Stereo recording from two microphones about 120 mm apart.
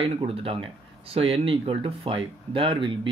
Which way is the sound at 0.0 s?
50° right (ahead or behind).